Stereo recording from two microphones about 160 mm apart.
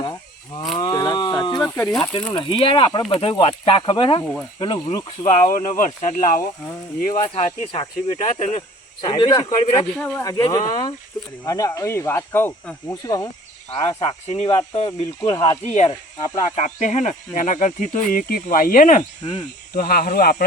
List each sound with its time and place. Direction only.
0.0 s cattle: 25° left (ahead or behind)
0.8 s a sound: 25° left (ahead or behind)
1.5 s snake: 10° left (ahead or behind)
2.3 s speech: 35° left (ahead or behind)
5.2 s speech: 50° left (ahead or behind)
7.3 s speech: 35° left (ahead or behind)
8.2 s speech: 45° left (ahead or behind)
9.0 s speech: 30° left (ahead or behind)
10.0 s speech: 10° left (ahead or behind)
10.4 s speech: 25° left (ahead or behind)
12.9 s speech: 25° left (ahead or behind)
16.6 s speech: 50° left (ahead or behind)
19.2 s speech: 30° left (ahead or behind)
19.7 s speech: 65° left (ahead or behind)